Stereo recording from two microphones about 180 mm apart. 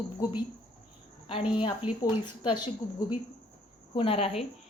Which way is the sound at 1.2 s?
30° left (ahead or behind).